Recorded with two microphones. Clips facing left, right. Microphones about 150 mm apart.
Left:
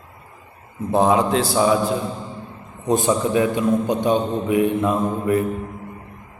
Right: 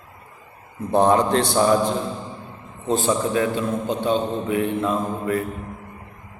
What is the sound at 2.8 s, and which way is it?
A man's voice, 15° left (ahead or behind).